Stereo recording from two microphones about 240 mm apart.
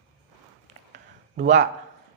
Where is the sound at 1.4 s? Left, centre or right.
Right.